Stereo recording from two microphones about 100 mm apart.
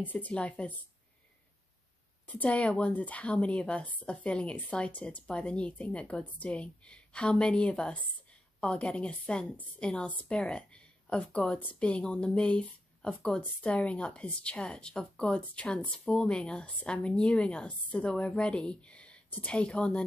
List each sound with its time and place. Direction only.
0.0 s a woman's voice: 15° left (ahead or behind)
2.2 s a woman's voice: 15° left (ahead or behind)